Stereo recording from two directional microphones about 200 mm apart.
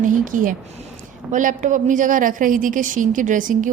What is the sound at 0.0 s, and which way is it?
A woman's voice, 40° right (ahead or behind).